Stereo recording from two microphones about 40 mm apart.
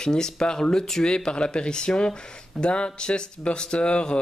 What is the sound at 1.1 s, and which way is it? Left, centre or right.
Speech, left.